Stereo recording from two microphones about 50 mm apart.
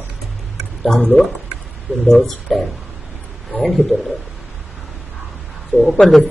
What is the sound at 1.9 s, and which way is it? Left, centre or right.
Speech, right.